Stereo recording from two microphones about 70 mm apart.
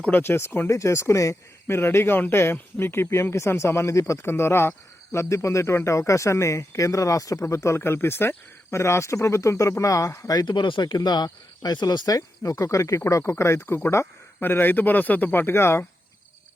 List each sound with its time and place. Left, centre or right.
0.1 s speech: left
0.7 s speech: left
1.6 s speech: left
5.1 s speech: left
10.3 s speech: left
14.4 s speech: left